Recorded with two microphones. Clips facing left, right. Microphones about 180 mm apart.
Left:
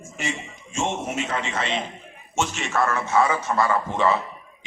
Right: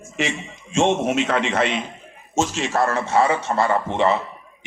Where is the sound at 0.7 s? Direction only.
75° right (ahead or behind).